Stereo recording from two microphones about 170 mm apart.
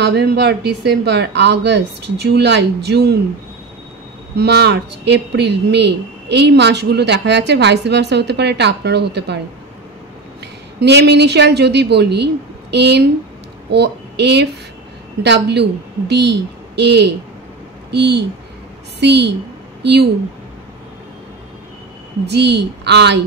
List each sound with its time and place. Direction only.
0.0 s speech: 75° right (ahead or behind)
4.4 s speech: 75° right (ahead or behind)
10.8 s a woman's voice: 80° right
22.2 s speech: 80° right